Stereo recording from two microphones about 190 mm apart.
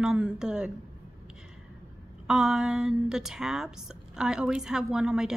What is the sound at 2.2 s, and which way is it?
A woman's voice, 5° right (ahead or behind).